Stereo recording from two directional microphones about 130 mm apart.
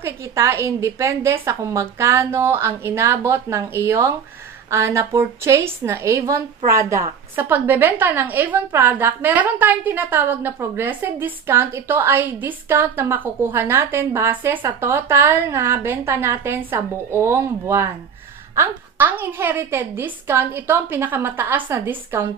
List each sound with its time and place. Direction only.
0.0 s a woman's voice: 20° right (ahead or behind)